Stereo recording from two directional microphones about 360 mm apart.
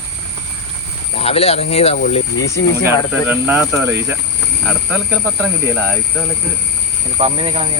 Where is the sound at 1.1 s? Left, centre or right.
Centre.